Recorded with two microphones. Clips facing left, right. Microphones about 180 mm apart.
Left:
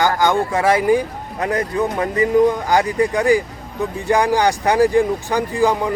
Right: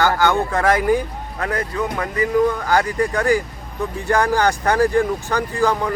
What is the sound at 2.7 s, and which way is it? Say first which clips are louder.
Speech: left 2 dB; 15° left (ahead or behind).